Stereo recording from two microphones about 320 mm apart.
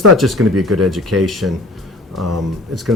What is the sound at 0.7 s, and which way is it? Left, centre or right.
Speech, right.